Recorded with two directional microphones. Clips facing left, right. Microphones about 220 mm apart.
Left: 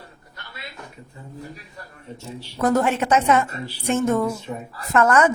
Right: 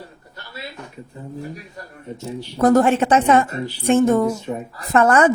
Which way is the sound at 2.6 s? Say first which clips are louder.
Right 5 dB; 35° right (ahead or behind).